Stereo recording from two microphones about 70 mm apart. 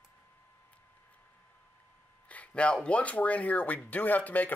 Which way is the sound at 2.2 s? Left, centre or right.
Centre.